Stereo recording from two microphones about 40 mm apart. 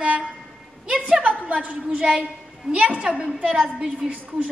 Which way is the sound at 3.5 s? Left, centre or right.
Right.